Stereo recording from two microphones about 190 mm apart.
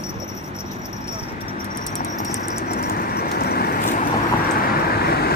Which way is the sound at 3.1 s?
55° left (ahead or behind).